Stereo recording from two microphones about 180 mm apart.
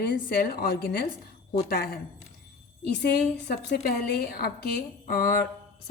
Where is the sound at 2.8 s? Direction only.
65° left (ahead or behind).